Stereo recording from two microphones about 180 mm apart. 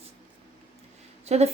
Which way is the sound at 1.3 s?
35° right (ahead or behind).